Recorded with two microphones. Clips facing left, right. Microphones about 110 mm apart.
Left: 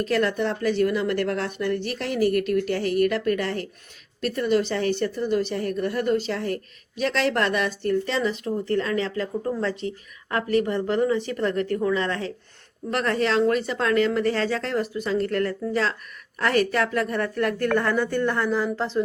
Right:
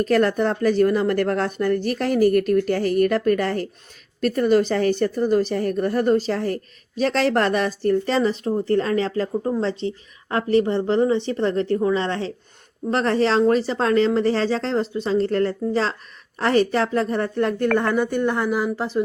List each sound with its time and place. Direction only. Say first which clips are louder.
0.0 s a woman's voice: right 4 dB; 45° right (ahead or behind)
9.4 s speech: right 3 dB; 25° right (ahead or behind)